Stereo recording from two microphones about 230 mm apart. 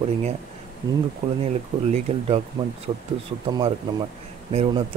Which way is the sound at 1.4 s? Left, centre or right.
Right.